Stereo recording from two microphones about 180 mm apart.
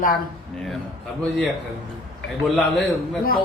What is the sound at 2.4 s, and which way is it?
Speech, centre (ahead or behind).